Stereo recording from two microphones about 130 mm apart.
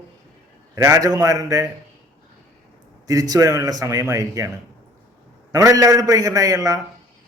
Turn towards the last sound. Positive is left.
turn(degrees=-25)  # may be behind; listen again after turning